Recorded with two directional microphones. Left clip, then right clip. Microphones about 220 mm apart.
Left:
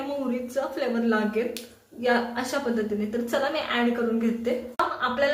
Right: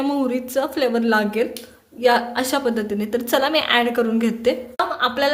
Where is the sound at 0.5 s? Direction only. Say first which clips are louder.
Right 7 dB; 50° right (ahead or behind).